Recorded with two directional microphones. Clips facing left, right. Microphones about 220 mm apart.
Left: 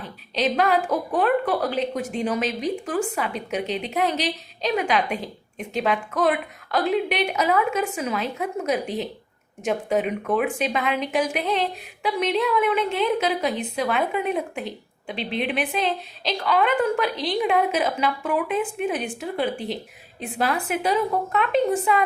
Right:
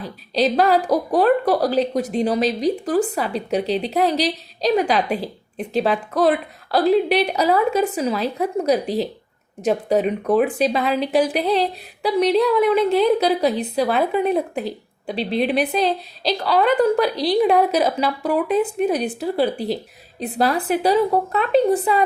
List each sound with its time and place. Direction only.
0.0 s a woman's voice: 35° right (ahead or behind)